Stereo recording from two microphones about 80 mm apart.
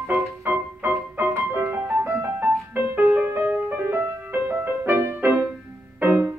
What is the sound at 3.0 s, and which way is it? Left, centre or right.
Music, right.